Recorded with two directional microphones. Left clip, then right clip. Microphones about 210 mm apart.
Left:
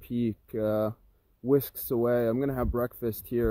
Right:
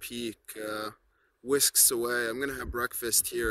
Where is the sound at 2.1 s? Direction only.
5° right (ahead or behind).